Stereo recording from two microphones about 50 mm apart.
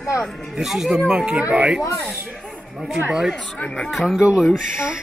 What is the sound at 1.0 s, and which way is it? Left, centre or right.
Speech, centre.